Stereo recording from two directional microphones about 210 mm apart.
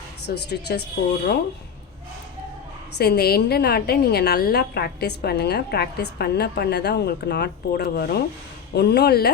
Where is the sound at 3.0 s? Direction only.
50° left (ahead or behind).